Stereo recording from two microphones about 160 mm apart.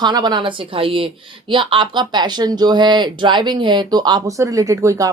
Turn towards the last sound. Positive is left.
turn(degrees=-20)  # may be behind; listen again after turning